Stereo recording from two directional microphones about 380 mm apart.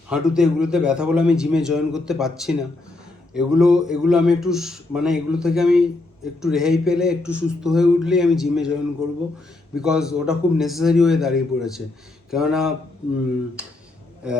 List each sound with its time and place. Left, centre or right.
0.1 s a man's voice: centre